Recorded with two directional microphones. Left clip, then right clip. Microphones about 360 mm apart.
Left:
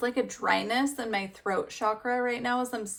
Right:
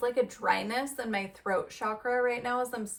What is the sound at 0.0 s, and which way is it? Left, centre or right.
Speech, centre.